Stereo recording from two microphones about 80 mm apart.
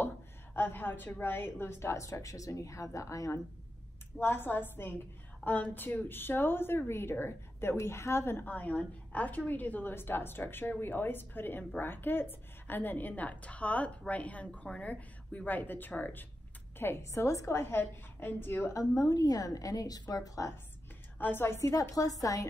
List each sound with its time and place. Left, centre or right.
0.6 s a woman's voice: left
4.2 s a woman's voice: left
17.7 s a woman's voice: left
18.7 s a woman's voice: left
21.2 s a woman's voice: left